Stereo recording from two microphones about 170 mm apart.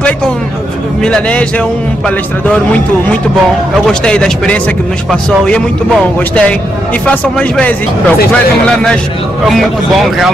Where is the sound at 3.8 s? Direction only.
5° left (ahead or behind).